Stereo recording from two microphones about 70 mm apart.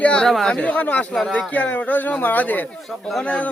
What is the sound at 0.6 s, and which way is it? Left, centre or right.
A man's voice, left.